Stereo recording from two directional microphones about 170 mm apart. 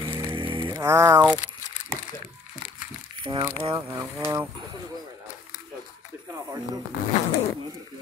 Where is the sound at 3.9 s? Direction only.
20° right (ahead or behind).